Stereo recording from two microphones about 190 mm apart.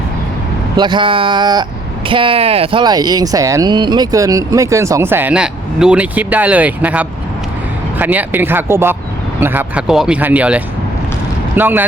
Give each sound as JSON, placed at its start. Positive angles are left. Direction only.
{"t": 0.8, "sound": "speech", "side_deg": -25}